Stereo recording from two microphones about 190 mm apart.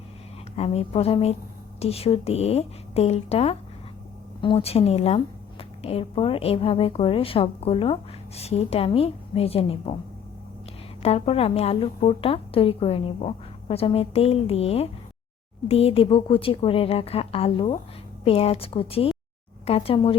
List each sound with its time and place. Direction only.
0.5 s a woman's voice: 35° left (ahead or behind)
11.0 s a woman's voice: 30° left (ahead or behind)